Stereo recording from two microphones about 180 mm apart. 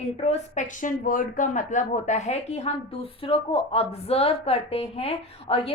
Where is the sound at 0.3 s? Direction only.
45° left (ahead or behind).